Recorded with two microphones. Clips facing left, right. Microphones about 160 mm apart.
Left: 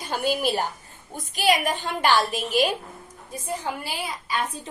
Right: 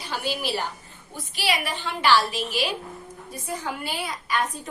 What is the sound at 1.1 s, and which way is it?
A woman's voice, 45° left (ahead or behind).